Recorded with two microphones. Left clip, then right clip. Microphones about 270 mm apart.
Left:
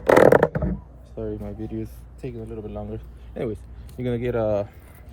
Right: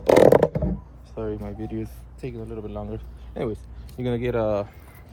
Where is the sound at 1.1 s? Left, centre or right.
Centre.